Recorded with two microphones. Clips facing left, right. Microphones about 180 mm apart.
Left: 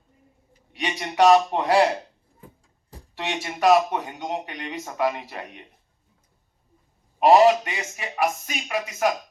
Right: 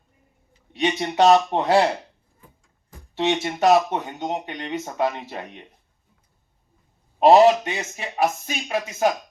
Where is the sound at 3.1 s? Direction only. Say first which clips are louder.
Right 8 dB; 25° right (ahead or behind).